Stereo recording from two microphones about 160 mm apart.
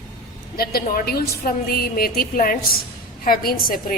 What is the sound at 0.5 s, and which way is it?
A woman's voice, 75° left (ahead or behind).